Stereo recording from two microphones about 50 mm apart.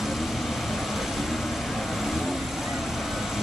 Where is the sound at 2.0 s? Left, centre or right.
Centre.